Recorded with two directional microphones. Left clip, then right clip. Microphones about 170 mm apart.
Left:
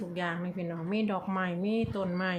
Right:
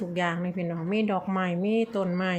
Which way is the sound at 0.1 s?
25° right (ahead or behind).